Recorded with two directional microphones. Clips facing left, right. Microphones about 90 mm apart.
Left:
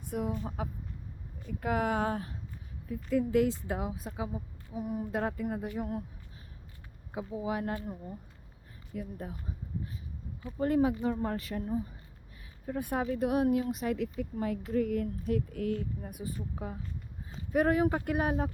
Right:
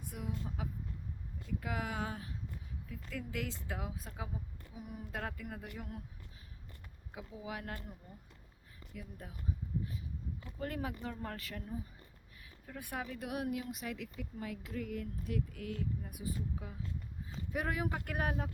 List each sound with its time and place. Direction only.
0.1 s speech: 45° left (ahead or behind)
2.8 s speech: 30° left (ahead or behind)
4.7 s speech: 30° left (ahead or behind)
7.1 s speech: 35° left (ahead or behind)
10.6 s speech: 25° left (ahead or behind)
12.6 s speech: 30° left (ahead or behind)
18.0 s speech: 20° left (ahead or behind)